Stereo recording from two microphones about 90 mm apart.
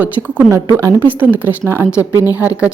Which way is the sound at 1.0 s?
20° right (ahead or behind).